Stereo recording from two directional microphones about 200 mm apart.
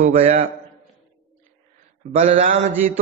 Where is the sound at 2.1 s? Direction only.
40° right (ahead or behind).